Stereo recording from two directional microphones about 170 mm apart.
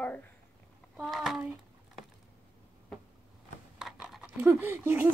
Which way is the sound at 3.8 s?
Centre (ahead or behind).